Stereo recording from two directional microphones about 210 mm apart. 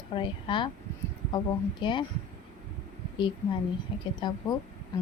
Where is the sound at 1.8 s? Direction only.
20° left (ahead or behind).